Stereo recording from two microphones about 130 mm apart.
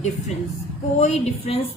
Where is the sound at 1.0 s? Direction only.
60° left (ahead or behind).